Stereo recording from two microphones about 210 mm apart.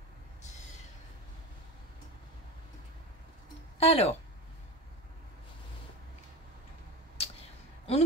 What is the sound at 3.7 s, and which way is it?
Speech, 30° left (ahead or behind).